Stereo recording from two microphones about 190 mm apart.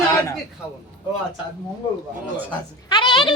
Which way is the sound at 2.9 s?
25° left (ahead or behind).